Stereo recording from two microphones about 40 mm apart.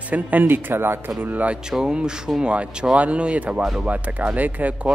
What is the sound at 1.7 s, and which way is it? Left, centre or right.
Speech, centre.